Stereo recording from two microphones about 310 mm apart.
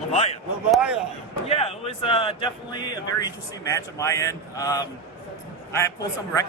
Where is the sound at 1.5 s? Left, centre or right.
Centre.